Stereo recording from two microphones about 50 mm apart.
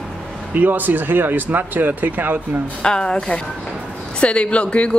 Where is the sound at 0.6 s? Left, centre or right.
Right.